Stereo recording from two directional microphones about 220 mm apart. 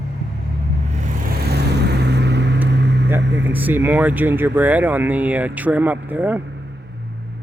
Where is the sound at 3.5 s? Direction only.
10° right (ahead or behind).